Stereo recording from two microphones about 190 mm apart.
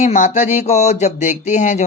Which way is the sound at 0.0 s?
40° left (ahead or behind).